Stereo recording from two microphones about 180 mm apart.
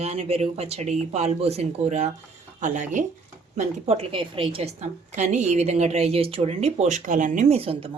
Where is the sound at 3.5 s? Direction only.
35° right (ahead or behind).